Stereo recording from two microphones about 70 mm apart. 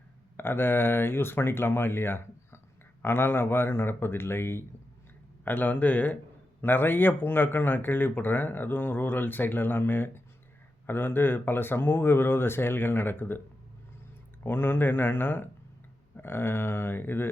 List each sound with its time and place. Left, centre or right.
0.3 s speech: left
14.4 s speech: left